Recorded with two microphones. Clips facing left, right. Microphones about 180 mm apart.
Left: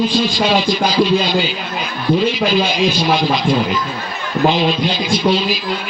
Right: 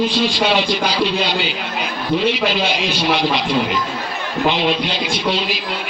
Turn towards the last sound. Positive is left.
turn(degrees=-65)  # may be behind; listen again after turning